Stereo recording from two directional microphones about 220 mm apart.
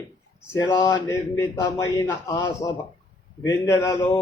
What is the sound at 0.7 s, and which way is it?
Speech, 15° left (ahead or behind).